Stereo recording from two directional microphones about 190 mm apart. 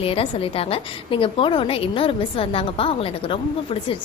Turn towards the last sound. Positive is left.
turn(degrees=30)  # may be behind; listen again after turning